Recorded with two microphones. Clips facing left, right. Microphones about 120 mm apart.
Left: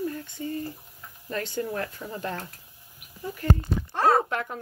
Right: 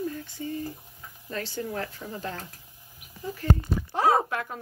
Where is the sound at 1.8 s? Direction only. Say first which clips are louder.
Left 2 dB; 20° right (ahead or behind).